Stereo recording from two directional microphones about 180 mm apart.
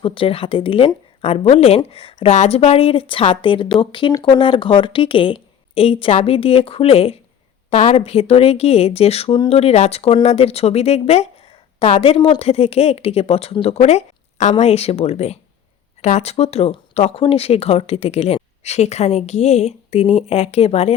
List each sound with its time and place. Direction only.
0.0 s speech: 30° left (ahead or behind)